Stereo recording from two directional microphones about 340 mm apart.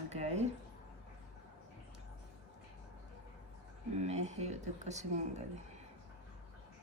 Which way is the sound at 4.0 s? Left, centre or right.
Centre.